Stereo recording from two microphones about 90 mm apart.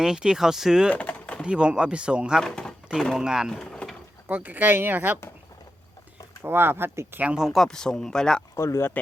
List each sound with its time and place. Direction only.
0.0 s speech: 10° right (ahead or behind)
0.9 s a sound: 15° left (ahead or behind)
1.4 s speech: 10° right (ahead or behind)
2.4 s a sound: 5° left (ahead or behind)
2.9 s speech: centre (ahead or behind)
3.6 s vehicle: 5° left (ahead or behind)
4.3 s speech: 20° right (ahead or behind)
6.4 s speech: 25° right (ahead or behind)
7.2 s speech: 15° right (ahead or behind)
7.4 s speech: centre (ahead or behind)
8.5 s speech: 35° left (ahead or behind)